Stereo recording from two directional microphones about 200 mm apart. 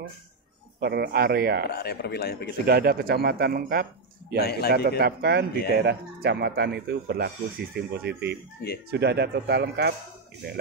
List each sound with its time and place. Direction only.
0.7 s speech: 55° right (ahead or behind)
1.7 s speech: 50° left (ahead or behind)
2.6 s speech: 50° right (ahead or behind)
4.4 s speech: 50° left (ahead or behind)
4.8 s speech: 50° right (ahead or behind)